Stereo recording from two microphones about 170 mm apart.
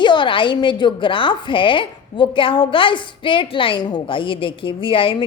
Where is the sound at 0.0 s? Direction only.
30° left (ahead or behind).